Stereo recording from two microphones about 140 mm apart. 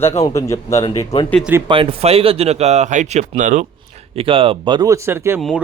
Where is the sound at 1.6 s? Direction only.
40° right (ahead or behind); by 3.7 s 65° right (ahead or behind).